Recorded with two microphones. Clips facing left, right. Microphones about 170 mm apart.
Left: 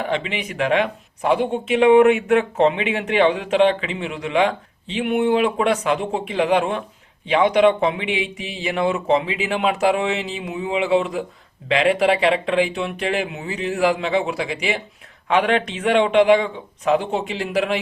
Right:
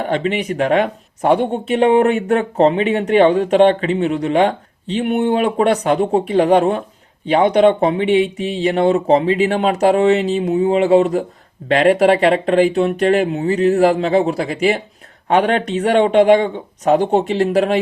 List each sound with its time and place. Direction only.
0.0 s speech: 45° right (ahead or behind)